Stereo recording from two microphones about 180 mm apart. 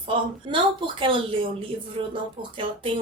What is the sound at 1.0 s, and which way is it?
Speech, 30° right (ahead or behind).